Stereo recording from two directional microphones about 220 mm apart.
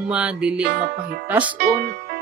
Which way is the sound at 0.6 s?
45° right (ahead or behind).